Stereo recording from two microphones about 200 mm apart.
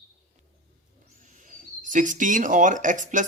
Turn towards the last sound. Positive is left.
turn(degrees=-40)  # may be behind; listen again after turning